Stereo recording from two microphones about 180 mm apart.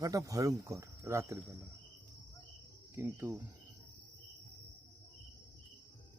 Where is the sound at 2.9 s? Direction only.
15° right (ahead or behind).